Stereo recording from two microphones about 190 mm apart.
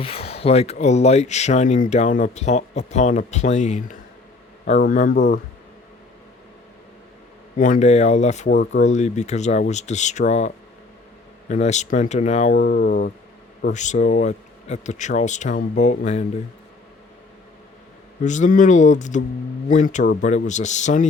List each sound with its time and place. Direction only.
0.0 s speech: 30° left (ahead or behind)
5.1 s speech: 65° left (ahead or behind)
7.5 s speech: 45° left (ahead or behind)
12.5 s speech: 50° left (ahead or behind)
13.7 s speech: 40° left (ahead or behind)
18.2 s speech: 40° left (ahead or behind)